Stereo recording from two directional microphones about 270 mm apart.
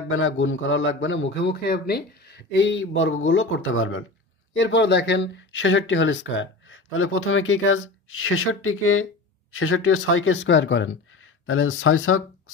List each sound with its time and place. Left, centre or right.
0.1 s speech: left